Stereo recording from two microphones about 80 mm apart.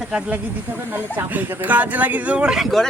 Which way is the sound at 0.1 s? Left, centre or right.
Centre.